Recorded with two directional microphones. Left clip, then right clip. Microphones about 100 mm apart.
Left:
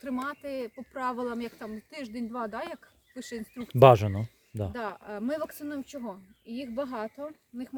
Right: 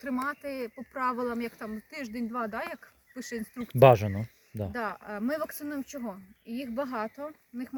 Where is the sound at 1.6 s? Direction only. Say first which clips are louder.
Right 1 dB; 5° right (ahead or behind).